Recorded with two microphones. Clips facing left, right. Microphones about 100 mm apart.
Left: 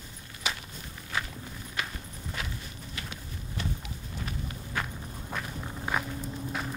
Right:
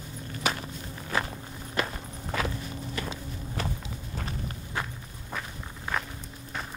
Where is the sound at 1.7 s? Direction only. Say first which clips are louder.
Right 6 dB; 60° right (ahead or behind).